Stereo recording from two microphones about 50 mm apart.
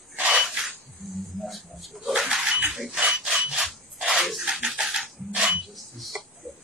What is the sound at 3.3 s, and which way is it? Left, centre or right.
Filing, centre.